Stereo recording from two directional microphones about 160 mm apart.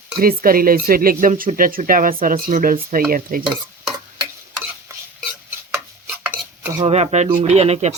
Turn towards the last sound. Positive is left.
turn(degrees=-40)  # may be behind; listen again after turning